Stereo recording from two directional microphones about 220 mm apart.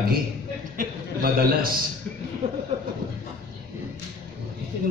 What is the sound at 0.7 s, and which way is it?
Speech, 40° right (ahead or behind).